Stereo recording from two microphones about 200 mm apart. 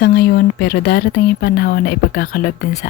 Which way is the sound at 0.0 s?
50° left (ahead or behind).